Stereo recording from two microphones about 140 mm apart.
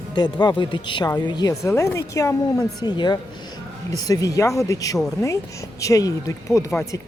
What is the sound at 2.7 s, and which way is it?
Speech, 30° left (ahead or behind).